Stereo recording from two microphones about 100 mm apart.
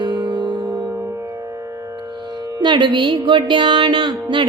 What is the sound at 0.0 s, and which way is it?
Music, 45° right (ahead or behind).